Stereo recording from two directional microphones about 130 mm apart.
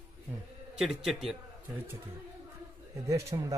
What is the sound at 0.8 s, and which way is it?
Speech, centre (ahead or behind).